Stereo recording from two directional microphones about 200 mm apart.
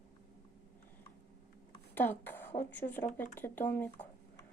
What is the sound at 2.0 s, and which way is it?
A woman's voice, 10° left (ahead or behind).